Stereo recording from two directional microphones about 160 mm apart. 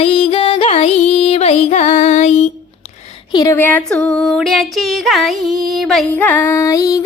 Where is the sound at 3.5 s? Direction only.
10° left (ahead or behind).